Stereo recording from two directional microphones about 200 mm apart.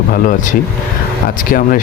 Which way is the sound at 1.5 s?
45° left (ahead or behind).